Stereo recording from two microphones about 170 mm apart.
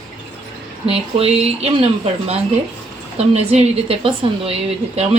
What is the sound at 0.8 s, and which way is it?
A woman's voice, 35° right (ahead or behind).